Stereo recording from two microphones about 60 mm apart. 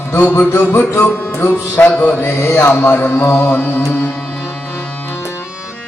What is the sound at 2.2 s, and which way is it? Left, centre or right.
Music, left.